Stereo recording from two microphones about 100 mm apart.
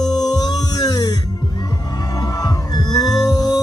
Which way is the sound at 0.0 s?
40° left (ahead or behind).